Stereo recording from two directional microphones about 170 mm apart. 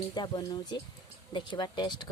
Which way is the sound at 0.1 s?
25° left (ahead or behind).